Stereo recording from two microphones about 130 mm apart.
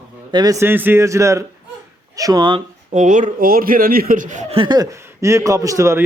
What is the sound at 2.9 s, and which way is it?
Speech, 70° right (ahead or behind).